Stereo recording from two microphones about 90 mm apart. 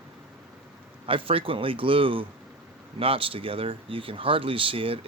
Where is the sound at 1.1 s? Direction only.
85° right.